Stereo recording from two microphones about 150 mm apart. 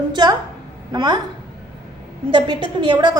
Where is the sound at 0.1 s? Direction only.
30° right (ahead or behind).